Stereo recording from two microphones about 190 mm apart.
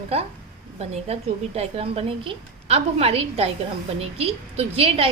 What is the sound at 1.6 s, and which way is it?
A woman's voice, 30° right (ahead or behind).